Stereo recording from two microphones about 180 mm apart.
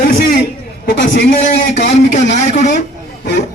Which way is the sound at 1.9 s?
40° left (ahead or behind).